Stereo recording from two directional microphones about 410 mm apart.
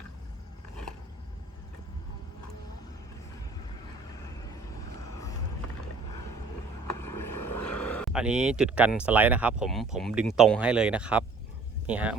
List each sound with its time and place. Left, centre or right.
6.8 s vehicle: left
7.8 s speech: centre